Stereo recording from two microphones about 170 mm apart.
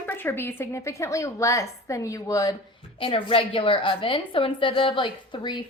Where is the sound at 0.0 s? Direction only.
10° left (ahead or behind).